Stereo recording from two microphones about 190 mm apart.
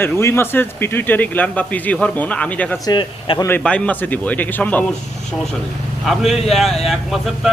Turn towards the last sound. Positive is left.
turn(degrees=0)  # may be behind; listen again after turning